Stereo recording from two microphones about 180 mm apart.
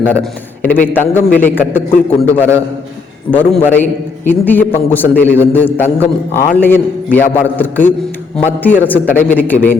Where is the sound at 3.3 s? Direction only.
10° left (ahead or behind).